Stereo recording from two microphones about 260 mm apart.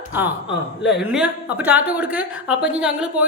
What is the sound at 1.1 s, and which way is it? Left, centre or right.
A woman's voice, centre.